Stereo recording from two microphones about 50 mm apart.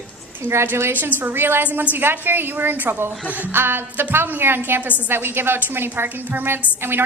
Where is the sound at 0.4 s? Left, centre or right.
Right.